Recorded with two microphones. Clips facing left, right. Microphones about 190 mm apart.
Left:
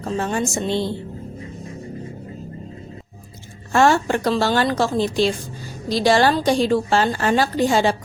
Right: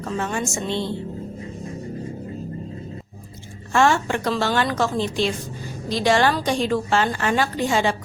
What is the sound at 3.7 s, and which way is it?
A woman's voice, 35° left (ahead or behind).